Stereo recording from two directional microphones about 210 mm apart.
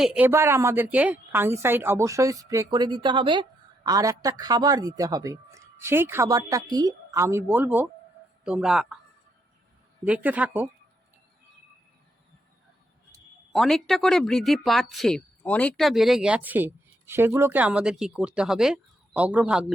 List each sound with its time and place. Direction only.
0.0 s a man's voice: 5° right (ahead or behind)
10.1 s a man's voice: 5° right (ahead or behind)
13.5 s speech: centre (ahead or behind)